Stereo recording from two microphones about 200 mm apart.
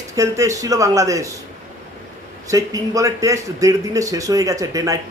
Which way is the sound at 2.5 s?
15° right (ahead or behind).